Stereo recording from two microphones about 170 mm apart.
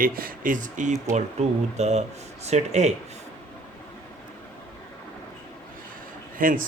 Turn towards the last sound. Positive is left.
turn(degrees=-55)  # may be behind; listen again after turning